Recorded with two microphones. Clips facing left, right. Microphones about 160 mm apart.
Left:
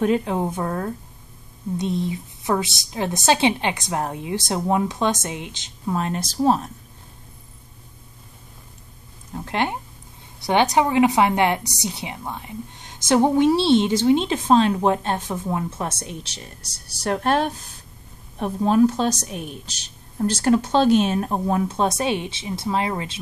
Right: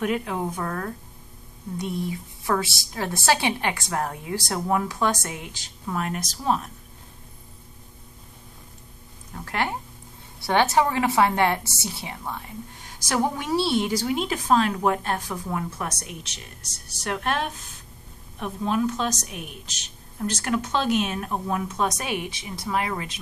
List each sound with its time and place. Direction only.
0.0 s a woman's voice: 30° left (ahead or behind)
9.3 s a woman's voice: 20° left (ahead or behind)